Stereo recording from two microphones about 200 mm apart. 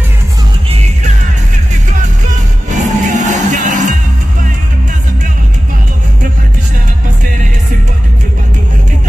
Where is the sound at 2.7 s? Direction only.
35° right (ahead or behind).